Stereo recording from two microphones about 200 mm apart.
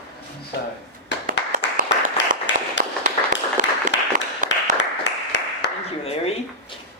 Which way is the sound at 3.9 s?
65° left (ahead or behind).